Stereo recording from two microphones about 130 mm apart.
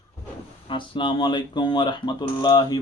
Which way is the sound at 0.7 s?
40° left (ahead or behind).